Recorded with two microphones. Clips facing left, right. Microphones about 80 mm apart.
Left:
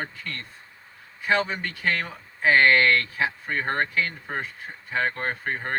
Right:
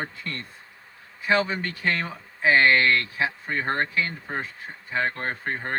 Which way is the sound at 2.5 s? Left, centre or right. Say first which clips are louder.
Left 1 dB; centre.